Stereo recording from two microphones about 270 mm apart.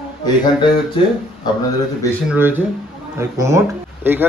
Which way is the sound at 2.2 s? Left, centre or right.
Centre.